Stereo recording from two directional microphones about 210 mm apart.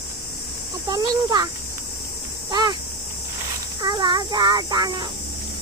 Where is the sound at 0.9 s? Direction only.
20° right (ahead or behind).